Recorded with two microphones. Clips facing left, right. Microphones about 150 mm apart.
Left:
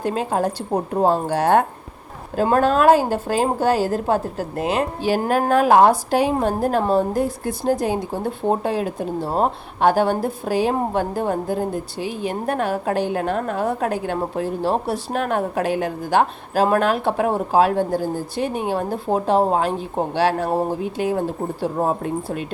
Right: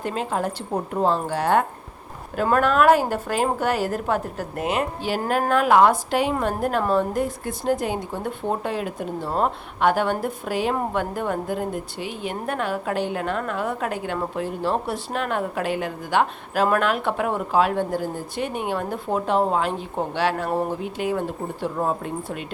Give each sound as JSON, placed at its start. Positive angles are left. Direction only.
{"t": 0.0, "sound": "a woman's voice", "side_deg": 40}